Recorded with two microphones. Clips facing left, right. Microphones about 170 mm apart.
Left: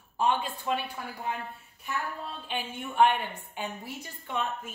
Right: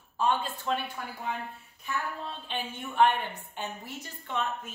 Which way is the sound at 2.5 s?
10° left (ahead or behind).